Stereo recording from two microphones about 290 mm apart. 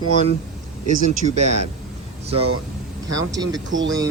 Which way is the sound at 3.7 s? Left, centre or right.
Right.